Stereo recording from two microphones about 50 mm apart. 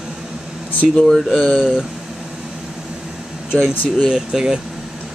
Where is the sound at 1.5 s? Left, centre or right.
Centre.